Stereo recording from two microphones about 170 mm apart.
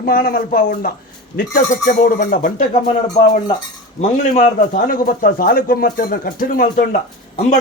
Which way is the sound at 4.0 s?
45° left (ahead or behind).